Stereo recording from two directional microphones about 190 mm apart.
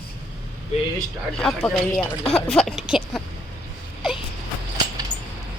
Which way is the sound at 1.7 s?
Centre (ahead or behind).